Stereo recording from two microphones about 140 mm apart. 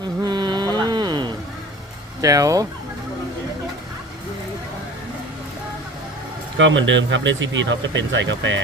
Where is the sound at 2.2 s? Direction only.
25° right (ahead or behind).